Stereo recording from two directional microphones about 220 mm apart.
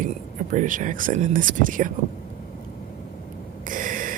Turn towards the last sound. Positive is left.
turn(degrees=-35)  # may be behind; listen again after turning